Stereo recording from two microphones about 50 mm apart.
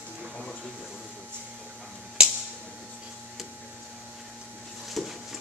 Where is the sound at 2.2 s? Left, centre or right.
Centre.